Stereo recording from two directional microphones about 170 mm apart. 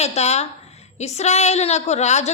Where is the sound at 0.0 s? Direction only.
40° left (ahead or behind).